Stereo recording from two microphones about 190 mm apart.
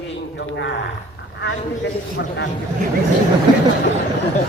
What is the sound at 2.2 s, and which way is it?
Speech, 70° left (ahead or behind).